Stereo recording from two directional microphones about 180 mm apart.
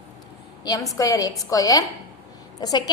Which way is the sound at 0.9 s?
20° left (ahead or behind).